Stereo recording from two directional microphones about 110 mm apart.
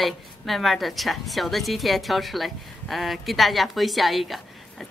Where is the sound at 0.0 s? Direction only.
Centre (ahead or behind).